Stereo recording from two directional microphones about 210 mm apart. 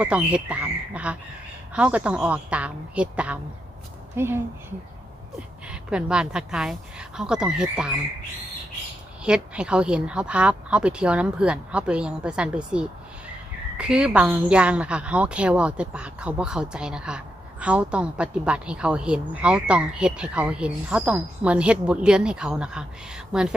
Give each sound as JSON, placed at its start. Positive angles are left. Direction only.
{"t": 0.0, "sound": "a woman's voice", "side_deg": -5}
{"t": 5.6, "sound": "a woman's voice", "side_deg": -5}
{"t": 9.2, "sound": "a woman's voice", "side_deg": -5}